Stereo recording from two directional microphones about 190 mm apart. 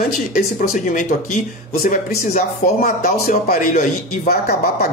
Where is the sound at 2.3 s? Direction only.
50° left (ahead or behind).